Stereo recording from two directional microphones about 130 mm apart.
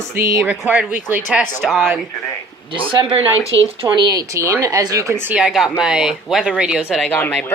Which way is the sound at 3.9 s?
35° right (ahead or behind).